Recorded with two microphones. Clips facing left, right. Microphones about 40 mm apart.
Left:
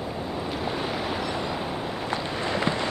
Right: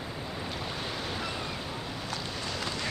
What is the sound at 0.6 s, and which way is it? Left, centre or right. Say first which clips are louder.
Waves: left 7 dB; centre.